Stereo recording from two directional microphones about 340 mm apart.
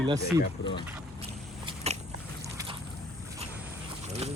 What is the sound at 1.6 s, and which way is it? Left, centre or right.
Biting, centre.